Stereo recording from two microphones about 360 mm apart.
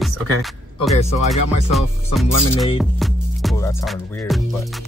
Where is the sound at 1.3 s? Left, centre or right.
Centre.